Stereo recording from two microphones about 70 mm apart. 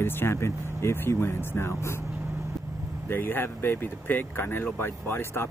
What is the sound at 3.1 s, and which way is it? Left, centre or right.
Speech, left.